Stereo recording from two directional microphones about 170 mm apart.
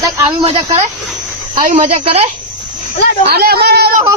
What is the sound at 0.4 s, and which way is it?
Speech, 30° right (ahead or behind).